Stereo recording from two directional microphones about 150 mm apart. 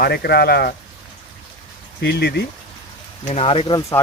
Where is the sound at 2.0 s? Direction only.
90° left.